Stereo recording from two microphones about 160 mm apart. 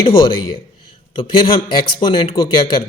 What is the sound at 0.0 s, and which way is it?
Speech, 30° left (ahead or behind).